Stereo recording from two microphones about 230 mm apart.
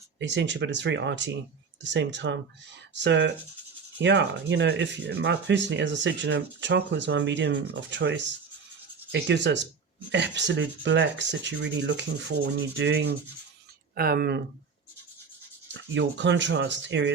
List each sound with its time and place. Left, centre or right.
0.2 s speech: right
15.7 s speech: right